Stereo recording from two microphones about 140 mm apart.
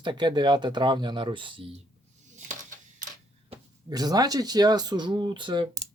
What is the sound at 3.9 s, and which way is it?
Speech, 30° right (ahead or behind).